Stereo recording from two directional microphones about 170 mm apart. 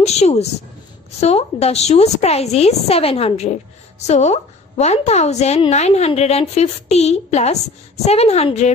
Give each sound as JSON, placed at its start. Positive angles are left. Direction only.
{"t": 0.0, "sound": "a woman's voice", "side_deg": 40}